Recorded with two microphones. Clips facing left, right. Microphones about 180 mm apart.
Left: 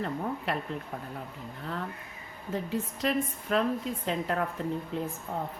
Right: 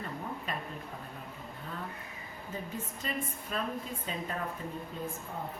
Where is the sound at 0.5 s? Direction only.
75° left (ahead or behind).